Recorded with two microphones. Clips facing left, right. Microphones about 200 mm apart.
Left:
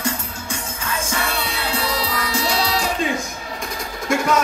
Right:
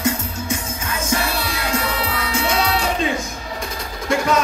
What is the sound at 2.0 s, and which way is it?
Music, 35° left (ahead or behind).